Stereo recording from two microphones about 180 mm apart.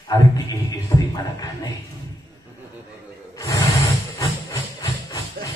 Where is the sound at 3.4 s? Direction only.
20° left (ahead or behind).